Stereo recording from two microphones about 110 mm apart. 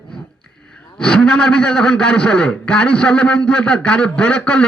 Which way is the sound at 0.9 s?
5° left (ahead or behind).